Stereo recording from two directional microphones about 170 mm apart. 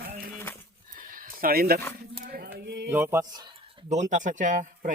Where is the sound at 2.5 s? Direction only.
80° right.